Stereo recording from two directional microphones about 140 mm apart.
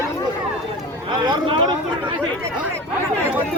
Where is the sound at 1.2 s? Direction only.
35° right (ahead or behind).